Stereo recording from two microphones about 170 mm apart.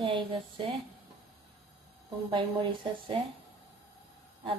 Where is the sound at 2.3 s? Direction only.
30° right (ahead or behind).